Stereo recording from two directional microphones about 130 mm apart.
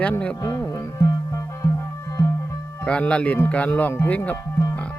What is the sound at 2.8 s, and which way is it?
Speech, 10° left (ahead or behind).